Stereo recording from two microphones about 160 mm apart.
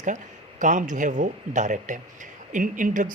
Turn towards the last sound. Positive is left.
turn(degrees=-55)  # may be behind; listen again after turning